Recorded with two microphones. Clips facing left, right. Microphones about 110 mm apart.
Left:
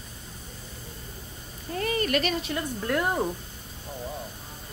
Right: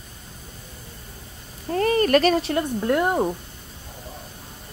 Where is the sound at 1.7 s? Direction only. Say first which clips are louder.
Right 8 dB; 45° right (ahead or behind).